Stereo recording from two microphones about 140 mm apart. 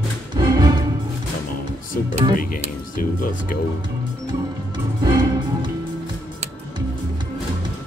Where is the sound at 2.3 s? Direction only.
80° left.